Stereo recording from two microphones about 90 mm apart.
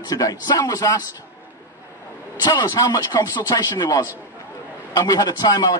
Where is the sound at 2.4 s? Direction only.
50° left (ahead or behind).